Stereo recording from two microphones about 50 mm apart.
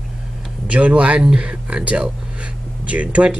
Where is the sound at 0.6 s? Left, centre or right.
Right.